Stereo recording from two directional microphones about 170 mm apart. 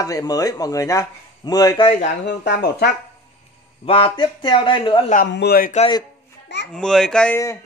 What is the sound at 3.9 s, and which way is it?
Speech, 30° left (ahead or behind).